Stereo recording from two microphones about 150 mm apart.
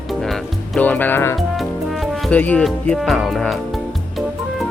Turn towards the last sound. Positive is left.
turn(degrees=0)  # may be behind; listen again after turning